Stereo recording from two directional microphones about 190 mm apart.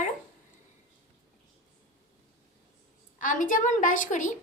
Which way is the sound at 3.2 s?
45° left (ahead or behind).